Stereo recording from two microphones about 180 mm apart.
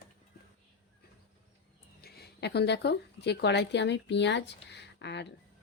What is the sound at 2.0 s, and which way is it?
A woman's voice, 60° left (ahead or behind).